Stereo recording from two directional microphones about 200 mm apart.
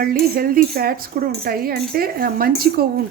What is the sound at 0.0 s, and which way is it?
Speech, 45° right (ahead or behind).